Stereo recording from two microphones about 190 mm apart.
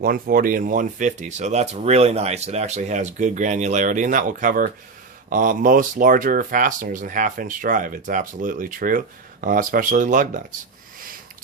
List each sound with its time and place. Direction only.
0.0 s speech: 50° right (ahead or behind)